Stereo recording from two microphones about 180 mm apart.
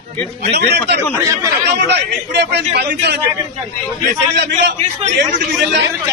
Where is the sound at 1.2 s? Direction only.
15° right (ahead or behind).